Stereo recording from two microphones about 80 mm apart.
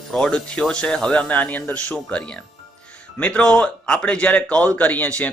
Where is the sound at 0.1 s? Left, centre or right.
Centre.